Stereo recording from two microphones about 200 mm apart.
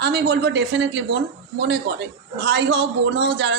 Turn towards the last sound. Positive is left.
turn(degrees=-60)  # may be behind; listen again after turning